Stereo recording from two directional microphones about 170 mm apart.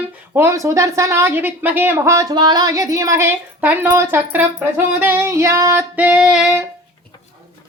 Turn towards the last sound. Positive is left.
turn(degrees=-5)  # may be behind; listen again after turning